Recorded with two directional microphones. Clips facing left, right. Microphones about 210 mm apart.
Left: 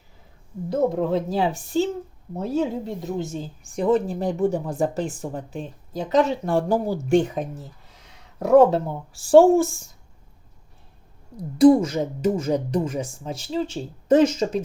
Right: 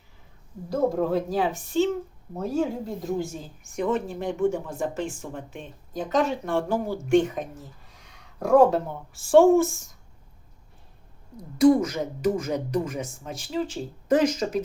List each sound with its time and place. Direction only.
0.7 s speech: 25° left (ahead or behind)
3.0 s a woman's voice: 25° left (ahead or behind)
11.5 s speech: 35° left (ahead or behind)